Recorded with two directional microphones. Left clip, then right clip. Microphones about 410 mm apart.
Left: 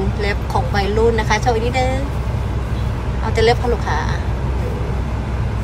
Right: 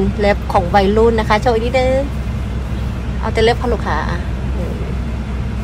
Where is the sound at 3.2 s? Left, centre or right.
Centre.